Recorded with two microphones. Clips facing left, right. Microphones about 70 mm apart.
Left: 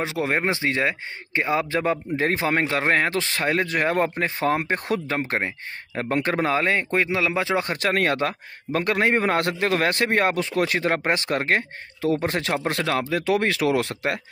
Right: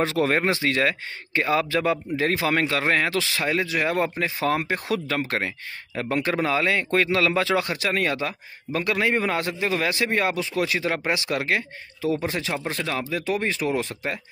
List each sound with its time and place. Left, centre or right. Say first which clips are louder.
0.0 s speech: right 2 dB; centre
7.7 s a man's voice: left 2 dB; left